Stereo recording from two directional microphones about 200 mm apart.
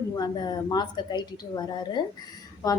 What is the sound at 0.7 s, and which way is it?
A woman's voice, 20° left (ahead or behind).